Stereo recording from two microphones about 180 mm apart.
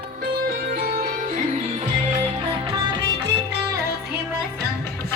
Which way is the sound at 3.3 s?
70° right (ahead or behind).